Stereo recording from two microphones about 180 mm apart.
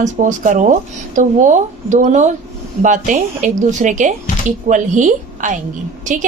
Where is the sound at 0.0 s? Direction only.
45° right (ahead or behind).